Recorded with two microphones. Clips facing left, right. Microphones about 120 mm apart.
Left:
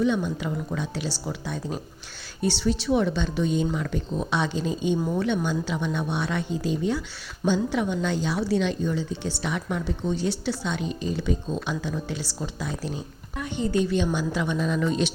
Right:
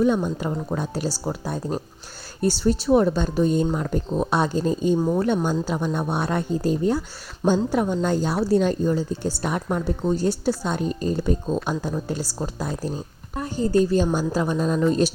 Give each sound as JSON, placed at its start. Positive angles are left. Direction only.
{"t": 0.0, "sound": "speech", "side_deg": -45}